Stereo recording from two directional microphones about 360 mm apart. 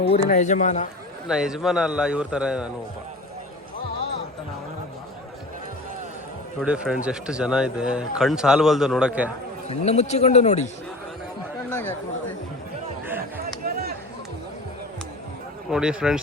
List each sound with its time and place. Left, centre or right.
0.1 s speech: centre
1.3 s speech: centre
6.6 s speech: centre
9.6 s a man's voice: centre
11.7 s chatter: centre
13.1 s a sound: centre
15.7 s speech: centre